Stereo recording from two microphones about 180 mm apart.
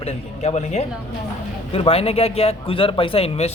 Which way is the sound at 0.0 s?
35° left (ahead or behind).